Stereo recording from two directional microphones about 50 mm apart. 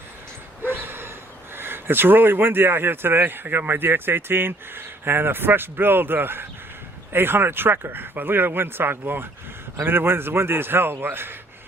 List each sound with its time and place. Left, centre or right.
0.6 s dog: right
1.5 s speech: right